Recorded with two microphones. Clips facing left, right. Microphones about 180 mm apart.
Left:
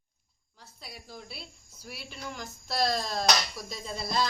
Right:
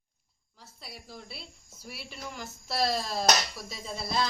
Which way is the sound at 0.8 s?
Centre (ahead or behind).